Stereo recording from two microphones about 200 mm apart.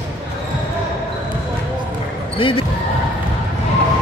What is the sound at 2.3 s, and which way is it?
Speech, 25° left (ahead or behind).